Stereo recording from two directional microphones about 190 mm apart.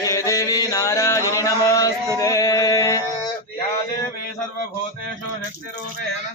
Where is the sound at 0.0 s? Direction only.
15° left (ahead or behind).